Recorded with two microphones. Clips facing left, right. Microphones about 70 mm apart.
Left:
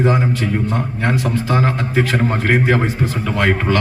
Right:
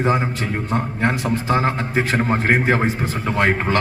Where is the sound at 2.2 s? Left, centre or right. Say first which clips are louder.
Left 1 dB; centre.